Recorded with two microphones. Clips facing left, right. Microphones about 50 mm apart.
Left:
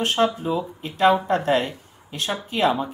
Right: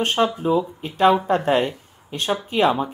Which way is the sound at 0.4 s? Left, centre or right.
Right.